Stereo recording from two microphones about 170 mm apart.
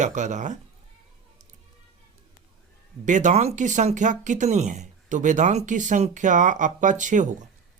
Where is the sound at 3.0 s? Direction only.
45° right (ahead or behind).